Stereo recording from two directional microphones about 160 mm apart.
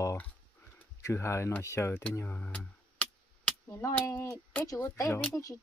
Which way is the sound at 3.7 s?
20° left (ahead or behind).